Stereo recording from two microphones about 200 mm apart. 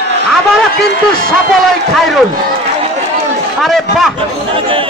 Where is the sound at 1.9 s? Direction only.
Centre (ahead or behind).